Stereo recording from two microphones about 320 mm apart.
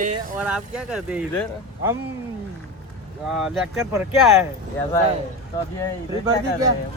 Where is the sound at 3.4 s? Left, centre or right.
Centre.